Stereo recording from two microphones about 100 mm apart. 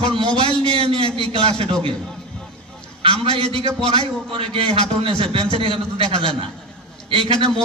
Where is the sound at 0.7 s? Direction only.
60° right (ahead or behind).